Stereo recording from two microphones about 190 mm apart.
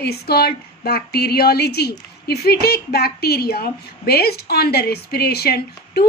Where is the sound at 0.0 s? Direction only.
55° left (ahead or behind).